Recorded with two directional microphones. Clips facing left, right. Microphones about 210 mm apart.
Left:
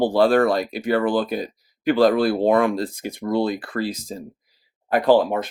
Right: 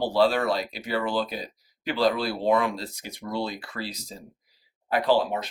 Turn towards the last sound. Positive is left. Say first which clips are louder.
# left 6 dB
turn(degrees=50)  # may be behind; listen again after turning